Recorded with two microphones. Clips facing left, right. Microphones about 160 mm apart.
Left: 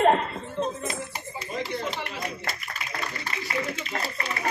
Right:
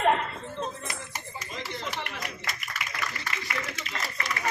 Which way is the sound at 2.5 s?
35° left (ahead or behind).